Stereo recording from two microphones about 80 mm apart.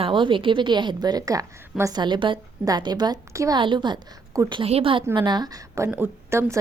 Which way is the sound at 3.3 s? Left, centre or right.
Right.